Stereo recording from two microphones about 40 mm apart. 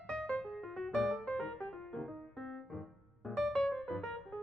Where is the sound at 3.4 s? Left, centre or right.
Centre.